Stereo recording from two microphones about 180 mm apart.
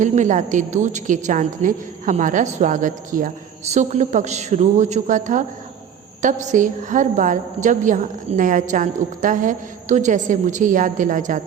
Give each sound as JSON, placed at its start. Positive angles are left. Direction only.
{"t": 0.0, "sound": "a woman's voice", "side_deg": -45}